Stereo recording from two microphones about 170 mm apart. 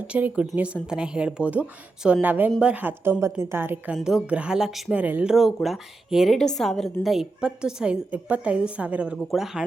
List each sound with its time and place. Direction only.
0.1 s a woman's voice: 10° right (ahead or behind)